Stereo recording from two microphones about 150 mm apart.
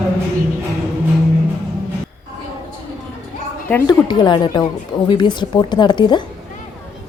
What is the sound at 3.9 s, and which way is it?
A woman's voice, 30° left (ahead or behind).